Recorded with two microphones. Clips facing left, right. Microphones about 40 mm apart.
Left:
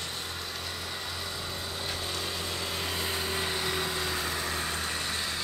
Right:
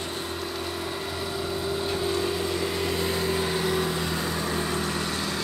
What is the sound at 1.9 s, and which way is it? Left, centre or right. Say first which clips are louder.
Vehicle: right 8 dB; right.